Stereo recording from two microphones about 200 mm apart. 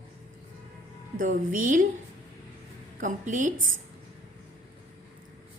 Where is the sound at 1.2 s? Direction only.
40° right (ahead or behind).